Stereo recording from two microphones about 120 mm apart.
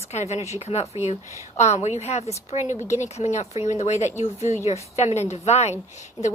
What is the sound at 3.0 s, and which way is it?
A woman's voice, 80° left.